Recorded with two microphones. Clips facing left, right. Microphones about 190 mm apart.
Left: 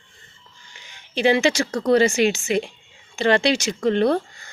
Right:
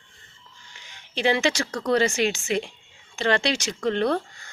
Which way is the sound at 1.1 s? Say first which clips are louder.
Left 4 dB; 5° left (ahead or behind).